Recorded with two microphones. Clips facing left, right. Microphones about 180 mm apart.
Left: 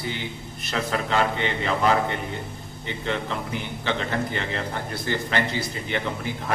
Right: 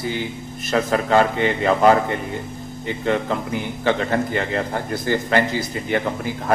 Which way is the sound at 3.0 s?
45° right (ahead or behind).